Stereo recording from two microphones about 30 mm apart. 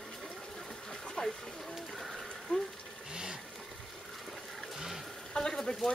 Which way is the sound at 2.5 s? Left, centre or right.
Left.